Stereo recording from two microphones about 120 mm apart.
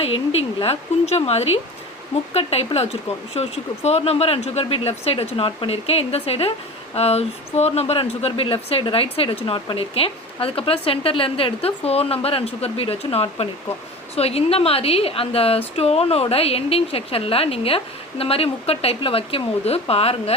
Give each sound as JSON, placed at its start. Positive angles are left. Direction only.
{"t": 0.0, "sound": "speech", "side_deg": 55}